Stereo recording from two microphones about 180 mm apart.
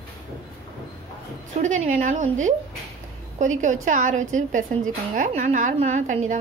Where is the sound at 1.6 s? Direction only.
40° right (ahead or behind).